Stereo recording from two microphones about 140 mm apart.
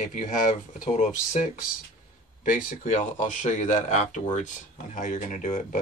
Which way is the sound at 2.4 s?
80° left.